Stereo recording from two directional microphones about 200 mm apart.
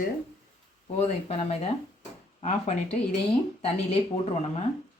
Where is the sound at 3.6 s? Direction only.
30° left (ahead or behind).